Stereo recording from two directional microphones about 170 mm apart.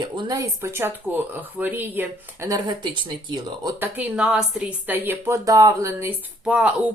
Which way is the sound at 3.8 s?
10° right (ahead or behind).